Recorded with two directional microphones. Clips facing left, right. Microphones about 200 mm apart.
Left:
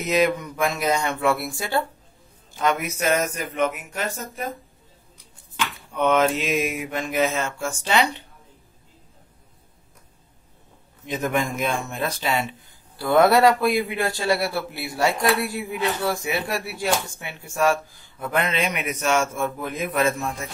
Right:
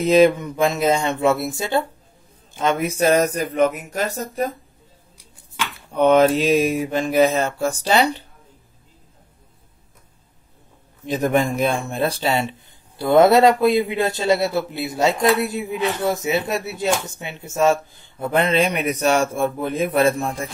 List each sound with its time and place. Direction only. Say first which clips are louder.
0.0 s speech: right 7 dB; 30° right (ahead or behind)
2.5 s mantra: right 3 dB; 25° right (ahead or behind)
5.9 s mantra: right 6 dB; 35° right (ahead or behind)
11.1 s speech: right 5 dB; 35° right (ahead or behind)